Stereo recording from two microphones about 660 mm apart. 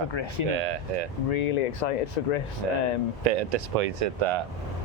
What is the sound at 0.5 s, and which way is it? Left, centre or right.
Speech, right.